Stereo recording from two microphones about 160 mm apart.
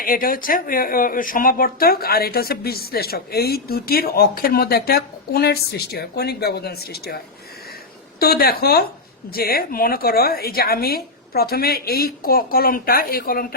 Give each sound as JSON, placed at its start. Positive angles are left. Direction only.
{"t": 0.0, "sound": "speech", "side_deg": 60}
{"t": 8.2, "sound": "speech", "side_deg": 75}